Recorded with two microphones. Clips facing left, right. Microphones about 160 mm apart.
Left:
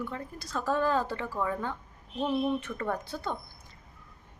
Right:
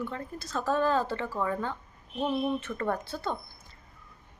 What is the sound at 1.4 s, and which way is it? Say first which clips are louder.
Speech: even; centre (ahead or behind).